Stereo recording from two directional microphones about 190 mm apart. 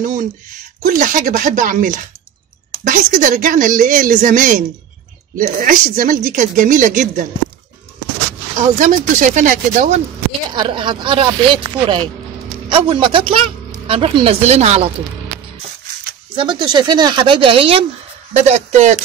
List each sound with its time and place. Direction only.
0.0 s speech: 40° right (ahead or behind)
8.7 s speech: 45° right (ahead or behind)
10.5 s a woman's voice: 25° right (ahead or behind)
16.3 s a woman's voice: 25° right (ahead or behind)